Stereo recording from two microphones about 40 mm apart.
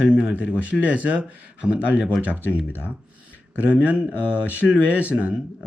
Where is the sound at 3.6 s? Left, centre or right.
Right.